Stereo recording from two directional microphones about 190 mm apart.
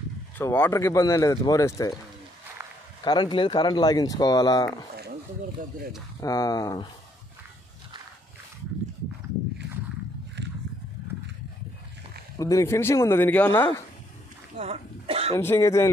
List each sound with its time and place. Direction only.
0.4 s speech: 10° left (ahead or behind)
3.0 s speech: 20° left (ahead or behind)
6.2 s speech: 20° left (ahead or behind)
10.4 s a sound: 65° right (ahead or behind)
12.4 s speech: 15° left (ahead or behind)
14.6 s a sound: 35° right (ahead or behind)
15.3 s speech: 15° left (ahead or behind)